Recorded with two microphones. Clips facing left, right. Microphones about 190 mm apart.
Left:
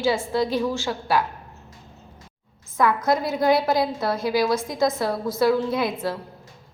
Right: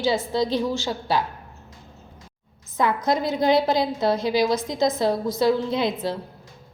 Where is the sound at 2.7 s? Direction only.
20° right (ahead or behind).